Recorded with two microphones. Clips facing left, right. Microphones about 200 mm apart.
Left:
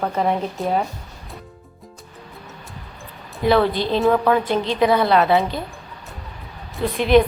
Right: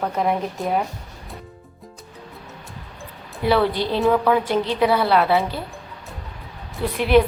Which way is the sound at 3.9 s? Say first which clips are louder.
Left 1 dB; 15° left (ahead or behind).